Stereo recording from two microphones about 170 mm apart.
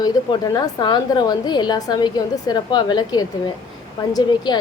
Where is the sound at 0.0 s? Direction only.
25° left (ahead or behind).